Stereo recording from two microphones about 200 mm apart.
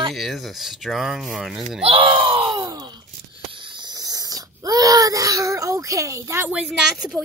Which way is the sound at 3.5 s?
25° right (ahead or behind).